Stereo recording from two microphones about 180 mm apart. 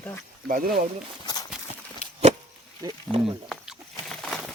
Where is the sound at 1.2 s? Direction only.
20° left (ahead or behind).